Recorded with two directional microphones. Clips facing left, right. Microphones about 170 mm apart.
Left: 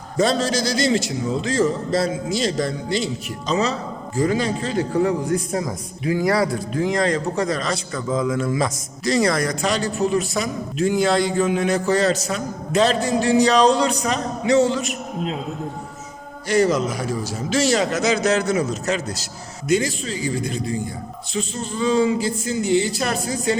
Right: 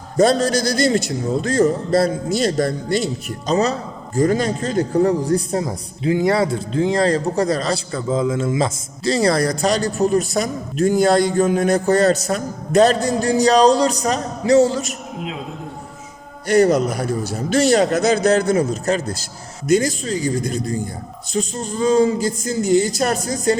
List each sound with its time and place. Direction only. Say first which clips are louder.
0.2 s a man's voice: right 4 dB; 50° right (ahead or behind)
16.5 s a man's voice: right 4 dB; 60° right (ahead or behind)
17.7 s a man's voice: right 4 dB; 40° right (ahead or behind)